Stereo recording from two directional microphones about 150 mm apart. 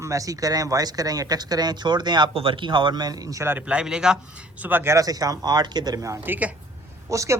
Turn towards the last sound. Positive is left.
turn(degrees=-20)  # may be behind; listen again after turning